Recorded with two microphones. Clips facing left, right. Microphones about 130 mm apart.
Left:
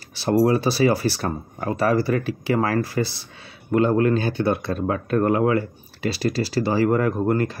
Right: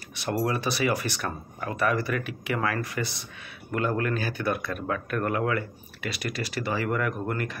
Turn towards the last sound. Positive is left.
turn(degrees=30)  # may be behind; listen again after turning